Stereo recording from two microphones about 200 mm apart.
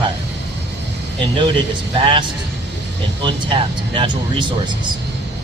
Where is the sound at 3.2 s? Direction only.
25° right (ahead or behind).